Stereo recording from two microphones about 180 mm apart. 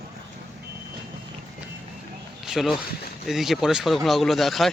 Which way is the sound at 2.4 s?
Centre (ahead or behind).